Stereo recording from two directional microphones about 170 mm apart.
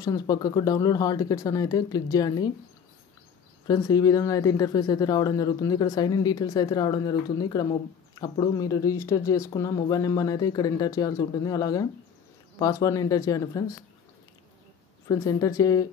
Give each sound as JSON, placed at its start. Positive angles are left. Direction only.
{"t": 0.0, "sound": "speech", "side_deg": 25}
{"t": 3.6, "sound": "speech", "side_deg": 20}
{"t": 15.0, "sound": "speech", "side_deg": 20}